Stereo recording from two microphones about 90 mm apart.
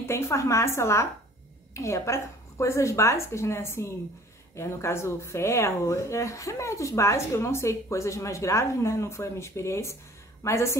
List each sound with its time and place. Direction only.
0.0 s a woman's voice: 30° left (ahead or behind)